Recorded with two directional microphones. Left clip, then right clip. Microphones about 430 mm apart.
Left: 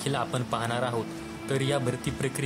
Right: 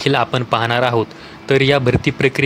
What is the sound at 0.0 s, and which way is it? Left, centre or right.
Speech, left.